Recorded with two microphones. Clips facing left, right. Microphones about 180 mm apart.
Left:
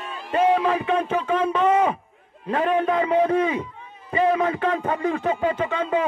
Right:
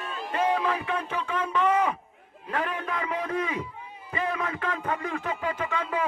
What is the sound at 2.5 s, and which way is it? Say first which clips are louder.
A man's voice: left 10 dB; 25° left (ahead or behind).